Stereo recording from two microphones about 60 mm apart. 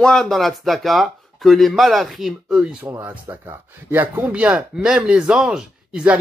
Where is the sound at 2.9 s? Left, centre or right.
Right.